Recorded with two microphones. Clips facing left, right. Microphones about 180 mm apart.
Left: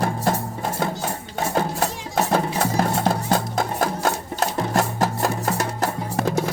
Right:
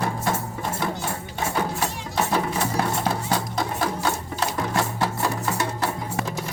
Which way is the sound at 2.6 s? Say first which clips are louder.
Left 3 dB; 45° left (ahead or behind).